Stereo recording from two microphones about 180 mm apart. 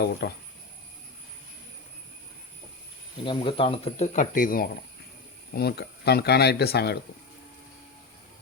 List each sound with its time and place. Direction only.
0.0 s speech: 65° left (ahead or behind)
3.2 s speech: 30° left (ahead or behind); by 4.7 s 50° left (ahead or behind)
5.5 s speech: 65° left (ahead or behind)